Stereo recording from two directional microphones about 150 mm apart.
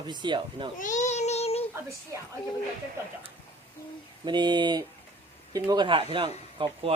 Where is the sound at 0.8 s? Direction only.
55° left (ahead or behind).